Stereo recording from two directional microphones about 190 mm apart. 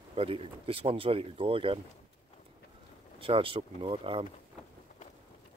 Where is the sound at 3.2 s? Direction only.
30° right (ahead or behind).